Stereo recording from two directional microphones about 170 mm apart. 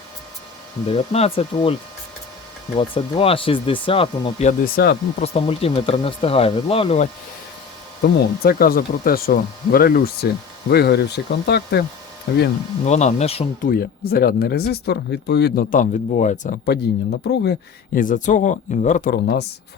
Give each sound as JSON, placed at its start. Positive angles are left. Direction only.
{"t": 0.9, "sound": "speech", "side_deg": 35}
{"t": 2.7, "sound": "speech", "side_deg": 30}
{"t": 4.6, "sound": "speech", "side_deg": 65}
{"t": 5.2, "sound": "speech", "side_deg": 35}
{"t": 8.0, "sound": "speech", "side_deg": 60}
{"t": 12.8, "sound": "speech", "side_deg": 40}
{"t": 13.6, "sound": "speech", "side_deg": 60}
{"t": 15.7, "sound": "speech", "side_deg": 50}
{"t": 16.6, "sound": "speech", "side_deg": 70}
{"t": 17.9, "sound": "speech", "side_deg": 50}
{"t": 19.1, "sound": "speech", "side_deg": 70}